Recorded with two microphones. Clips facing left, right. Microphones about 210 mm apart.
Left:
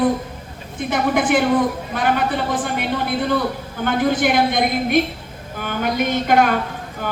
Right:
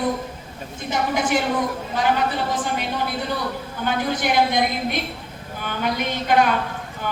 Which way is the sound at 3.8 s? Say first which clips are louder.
Left 6 dB; 55° left (ahead or behind).